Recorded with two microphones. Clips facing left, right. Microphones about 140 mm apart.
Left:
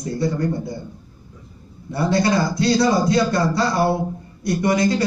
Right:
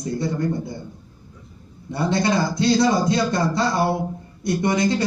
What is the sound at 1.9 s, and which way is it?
Speech, 25° right (ahead or behind).